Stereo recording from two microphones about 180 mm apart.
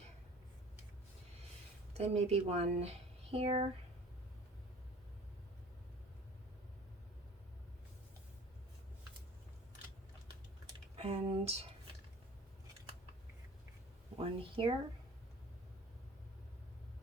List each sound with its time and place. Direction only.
1.9 s speech: 35° right (ahead or behind)
10.9 s speech: 35° right (ahead or behind)
14.2 s speech: 30° right (ahead or behind)